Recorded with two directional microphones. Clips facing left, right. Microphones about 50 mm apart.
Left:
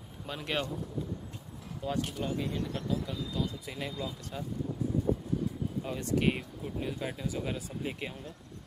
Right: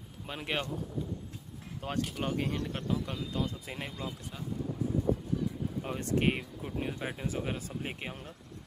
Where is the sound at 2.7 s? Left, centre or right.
Right.